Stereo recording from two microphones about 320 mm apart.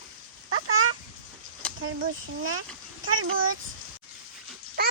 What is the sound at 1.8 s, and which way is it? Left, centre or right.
Speech, right.